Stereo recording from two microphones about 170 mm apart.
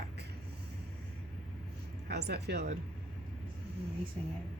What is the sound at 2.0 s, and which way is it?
Speech, 75° right (ahead or behind).